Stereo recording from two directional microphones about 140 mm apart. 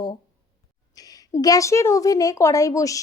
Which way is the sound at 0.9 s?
25° left (ahead or behind).